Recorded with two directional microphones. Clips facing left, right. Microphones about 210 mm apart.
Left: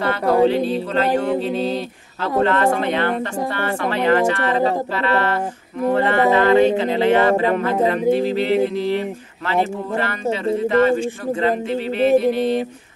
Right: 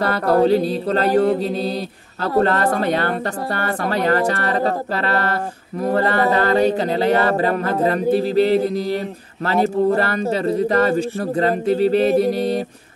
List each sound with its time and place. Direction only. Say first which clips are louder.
0.0 s speech: even; 40° right (ahead or behind)